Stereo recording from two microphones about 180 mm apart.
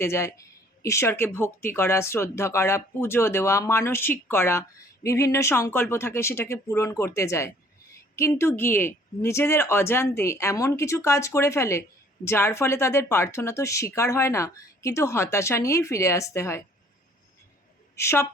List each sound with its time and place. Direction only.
0.0 s speech: 15° left (ahead or behind)
17.9 s a woman's voice: 15° left (ahead or behind)